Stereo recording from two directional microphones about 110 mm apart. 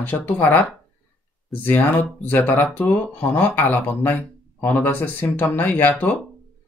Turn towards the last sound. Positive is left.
turn(degrees=15)  # may be behind; listen again after turning